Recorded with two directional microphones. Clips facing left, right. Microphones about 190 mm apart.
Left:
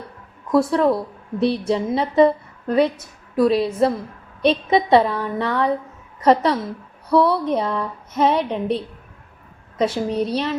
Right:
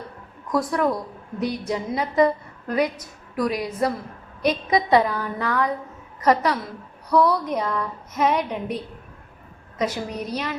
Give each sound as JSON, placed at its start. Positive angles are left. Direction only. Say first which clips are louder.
{"t": 0.5, "sound": "a woman's voice", "louder": "left 5 dB", "side_deg": 25}